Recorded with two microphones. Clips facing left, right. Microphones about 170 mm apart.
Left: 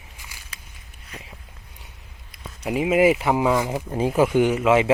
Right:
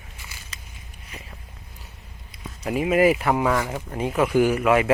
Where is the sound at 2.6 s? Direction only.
15° left (ahead or behind).